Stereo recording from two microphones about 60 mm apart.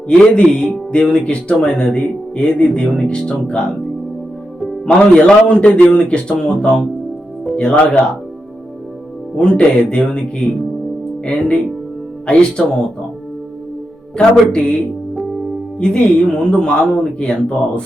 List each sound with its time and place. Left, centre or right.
0.1 s speech: centre
4.9 s speech: centre
9.3 s speech: centre
14.2 s speech: centre
15.8 s speech: centre